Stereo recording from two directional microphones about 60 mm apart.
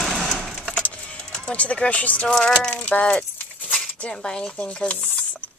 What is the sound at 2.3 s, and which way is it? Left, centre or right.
Speech, centre.